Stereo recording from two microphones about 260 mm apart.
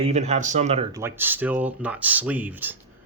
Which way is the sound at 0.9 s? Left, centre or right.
Centre.